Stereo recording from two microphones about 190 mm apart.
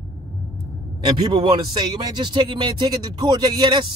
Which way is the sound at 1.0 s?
25° right (ahead or behind).